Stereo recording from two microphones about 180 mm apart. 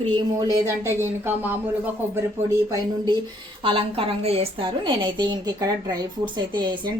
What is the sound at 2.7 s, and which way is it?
A woman's voice, 20° right (ahead or behind).